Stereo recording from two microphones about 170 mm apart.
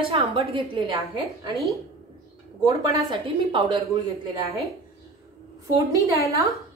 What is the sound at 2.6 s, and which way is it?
A woman's voice, 25° right (ahead or behind).